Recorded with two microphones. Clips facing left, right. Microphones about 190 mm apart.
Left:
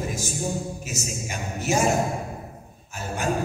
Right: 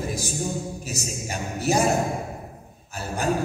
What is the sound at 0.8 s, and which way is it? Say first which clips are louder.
Speech: even; 35° right (ahead or behind).